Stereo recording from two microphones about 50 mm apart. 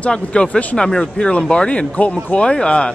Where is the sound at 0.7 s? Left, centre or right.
Centre.